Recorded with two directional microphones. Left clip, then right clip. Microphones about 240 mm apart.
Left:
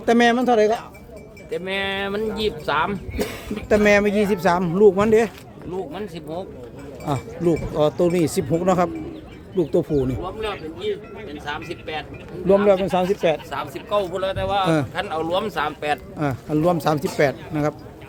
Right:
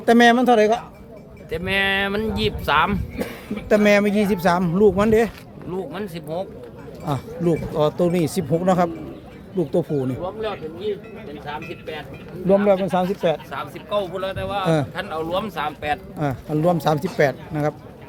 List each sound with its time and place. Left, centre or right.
0.0 s a man's voice: centre
1.5 s speech: right
3.7 s speech: centre
5.7 s speech: right
7.0 s speech: centre
11.4 s speech: centre
12.5 s speech: centre
13.5 s speech: left
16.1 s speech: centre